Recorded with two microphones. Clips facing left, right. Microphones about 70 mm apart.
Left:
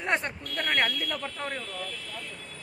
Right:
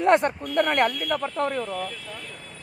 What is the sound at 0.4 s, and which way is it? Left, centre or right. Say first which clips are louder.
Speech: right 7 dB; centre.